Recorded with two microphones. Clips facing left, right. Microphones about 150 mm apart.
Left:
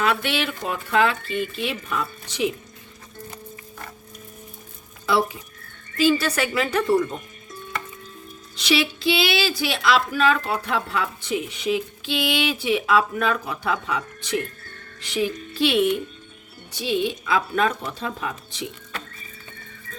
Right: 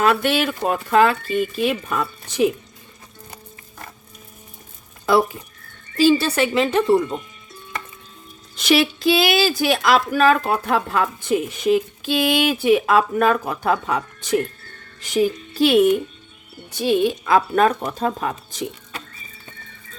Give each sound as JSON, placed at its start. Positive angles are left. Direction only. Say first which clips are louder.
{"t": 0.0, "sound": "a woman's voice", "louder": "right 5 dB", "side_deg": -45}
{"t": 5.0, "sound": "a woman's voice", "louder": "right 4 dB", "side_deg": -45}
{"t": 6.0, "sound": "a woman's voice", "louder": "right 4 dB", "side_deg": -30}
{"t": 8.5, "sound": "a woman's voice", "louder": "right 5 dB", "side_deg": -50}